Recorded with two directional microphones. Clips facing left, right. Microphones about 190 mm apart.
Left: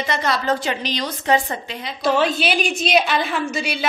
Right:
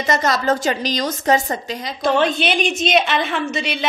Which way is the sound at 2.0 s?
Centre (ahead or behind).